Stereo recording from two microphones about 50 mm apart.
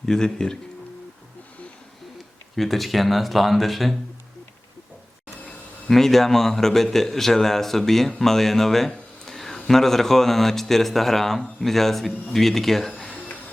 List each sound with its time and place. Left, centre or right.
0.0 s a man's voice: centre
2.6 s speech: centre
5.9 s a man's voice: centre
13.1 s a sound: left